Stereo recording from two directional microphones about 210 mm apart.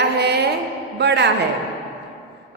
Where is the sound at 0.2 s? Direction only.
50° right (ahead or behind).